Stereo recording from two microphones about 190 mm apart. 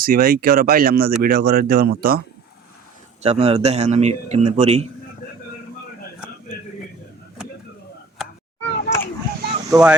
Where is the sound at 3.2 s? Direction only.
35° right (ahead or behind).